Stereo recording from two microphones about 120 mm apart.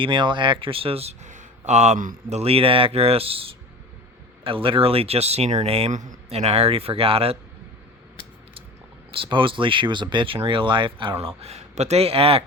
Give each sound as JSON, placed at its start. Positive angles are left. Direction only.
{"t": 0.0, "sound": "speech", "side_deg": -45}
{"t": 9.1, "sound": "speech", "side_deg": -45}
{"t": 11.2, "sound": "speech", "side_deg": -55}